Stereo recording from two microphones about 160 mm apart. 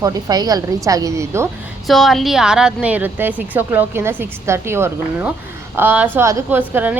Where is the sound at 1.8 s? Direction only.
Centre (ahead or behind).